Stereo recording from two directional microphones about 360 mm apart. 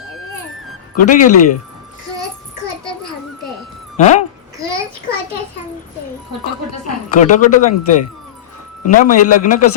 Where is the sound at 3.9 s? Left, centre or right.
Centre.